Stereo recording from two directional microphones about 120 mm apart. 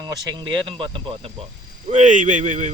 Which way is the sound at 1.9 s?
90° right.